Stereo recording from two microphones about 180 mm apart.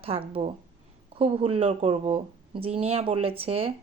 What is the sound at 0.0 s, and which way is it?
Speech, 30° right (ahead or behind).